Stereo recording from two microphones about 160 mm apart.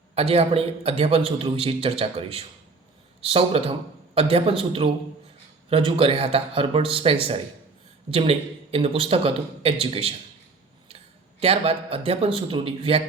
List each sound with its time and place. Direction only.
0.1 s a man's voice: 40° right (ahead or behind)
11.3 s a man's voice: 40° right (ahead or behind)